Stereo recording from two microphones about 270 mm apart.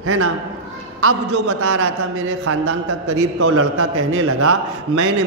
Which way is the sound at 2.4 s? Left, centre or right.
Right.